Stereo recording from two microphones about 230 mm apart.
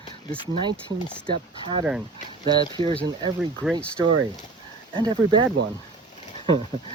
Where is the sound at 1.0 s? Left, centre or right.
Centre.